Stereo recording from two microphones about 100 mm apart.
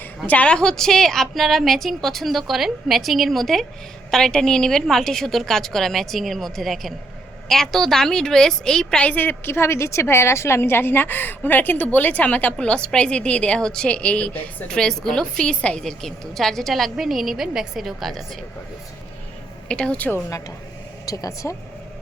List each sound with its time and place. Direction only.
0.3 s a woman's voice: 10° left (ahead or behind)
19.6 s a woman's voice: 10° left (ahead or behind)
21.1 s speech: 35° left (ahead or behind)